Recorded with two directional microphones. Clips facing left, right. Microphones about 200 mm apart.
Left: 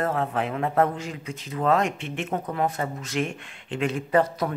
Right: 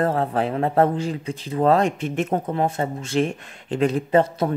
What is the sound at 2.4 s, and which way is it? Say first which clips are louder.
Speech: right 4 dB; 25° right (ahead or behind).